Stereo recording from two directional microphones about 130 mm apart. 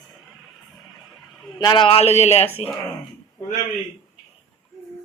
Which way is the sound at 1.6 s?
35° left (ahead or behind).